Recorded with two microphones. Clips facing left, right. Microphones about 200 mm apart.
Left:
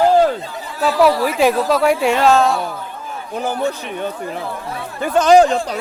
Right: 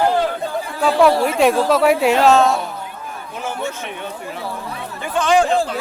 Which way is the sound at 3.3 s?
35° left (ahead or behind).